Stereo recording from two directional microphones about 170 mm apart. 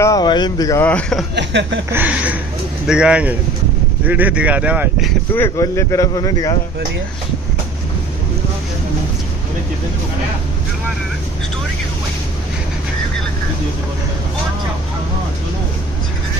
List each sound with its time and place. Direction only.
0.0 s speech: 25° left (ahead or behind)
0.8 s a man's voice: 10° left (ahead or behind)
1.3 s speech: 90° right
1.9 s speech: 10° right (ahead or behind)
5.3 s speech: 15° left (ahead or behind)